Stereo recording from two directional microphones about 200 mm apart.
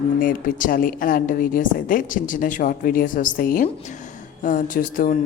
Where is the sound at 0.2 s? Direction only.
45° left (ahead or behind).